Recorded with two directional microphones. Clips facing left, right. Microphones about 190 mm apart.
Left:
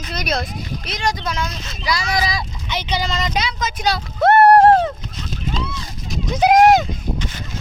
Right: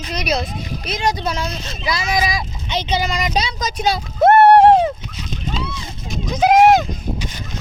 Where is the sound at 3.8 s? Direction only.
20° right (ahead or behind).